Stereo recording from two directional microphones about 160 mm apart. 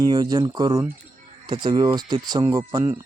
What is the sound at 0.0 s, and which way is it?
Speech, 25° right (ahead or behind).